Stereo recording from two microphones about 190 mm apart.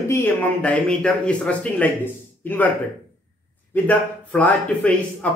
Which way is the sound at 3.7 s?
10° left (ahead or behind).